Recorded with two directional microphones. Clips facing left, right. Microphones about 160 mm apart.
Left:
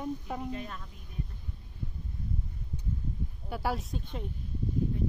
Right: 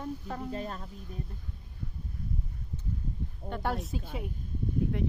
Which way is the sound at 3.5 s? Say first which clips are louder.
Even; 5° left (ahead or behind).